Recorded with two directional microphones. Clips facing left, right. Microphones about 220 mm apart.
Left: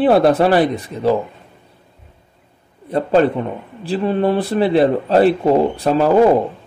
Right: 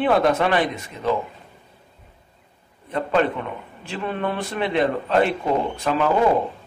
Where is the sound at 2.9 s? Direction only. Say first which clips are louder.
Left 7 dB; 35° left (ahead or behind).